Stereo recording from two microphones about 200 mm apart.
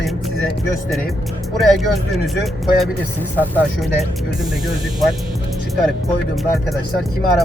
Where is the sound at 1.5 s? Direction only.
Centre (ahead or behind).